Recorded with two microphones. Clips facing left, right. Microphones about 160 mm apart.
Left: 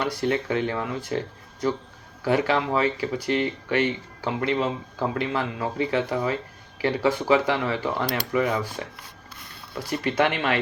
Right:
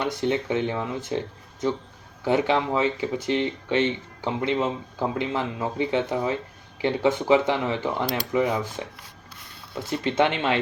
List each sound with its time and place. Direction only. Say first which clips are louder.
0.0 s speech: even; 20° right (ahead or behind)
2.2 s speech: even; 20° right (ahead or behind)
9.7 s speech: right 1 dB; 20° right (ahead or behind)